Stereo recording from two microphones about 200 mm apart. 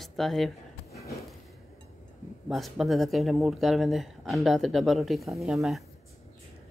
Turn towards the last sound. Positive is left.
turn(degrees=0)  # may be behind; listen again after turning